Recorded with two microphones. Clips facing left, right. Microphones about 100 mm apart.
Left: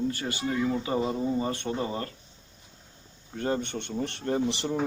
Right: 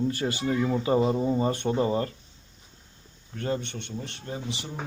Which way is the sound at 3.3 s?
30° left (ahead or behind).